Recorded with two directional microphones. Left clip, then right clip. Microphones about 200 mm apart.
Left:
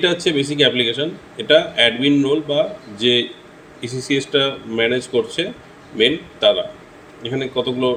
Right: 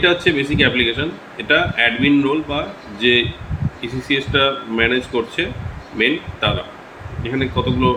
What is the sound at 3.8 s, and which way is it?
A man's voice, 35° left (ahead or behind).